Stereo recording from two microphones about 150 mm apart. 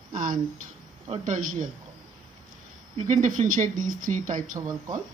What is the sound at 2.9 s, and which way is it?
Speech, 50° right (ahead or behind).